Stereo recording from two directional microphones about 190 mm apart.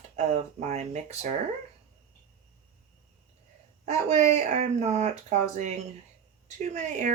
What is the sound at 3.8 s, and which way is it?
Speech, 35° right (ahead or behind).